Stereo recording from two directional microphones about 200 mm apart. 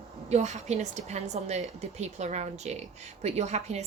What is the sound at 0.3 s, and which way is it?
A woman's voice, 35° right (ahead or behind).